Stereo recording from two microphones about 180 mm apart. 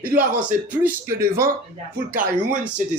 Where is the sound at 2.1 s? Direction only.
50° right (ahead or behind).